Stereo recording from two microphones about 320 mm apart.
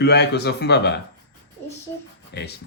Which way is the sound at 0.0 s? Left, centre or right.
Left.